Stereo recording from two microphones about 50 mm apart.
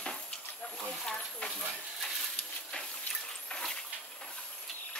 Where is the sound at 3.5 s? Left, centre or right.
Centre.